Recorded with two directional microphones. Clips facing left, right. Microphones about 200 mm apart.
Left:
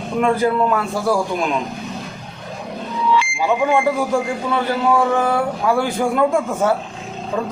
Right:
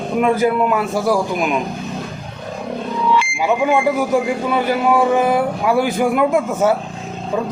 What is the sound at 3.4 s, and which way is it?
A man's voice, 10° right (ahead or behind).